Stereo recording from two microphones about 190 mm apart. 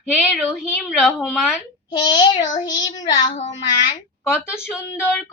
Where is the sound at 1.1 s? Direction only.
Centre (ahead or behind).